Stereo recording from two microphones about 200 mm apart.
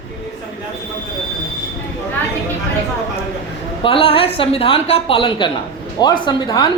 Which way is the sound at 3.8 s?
25° left (ahead or behind).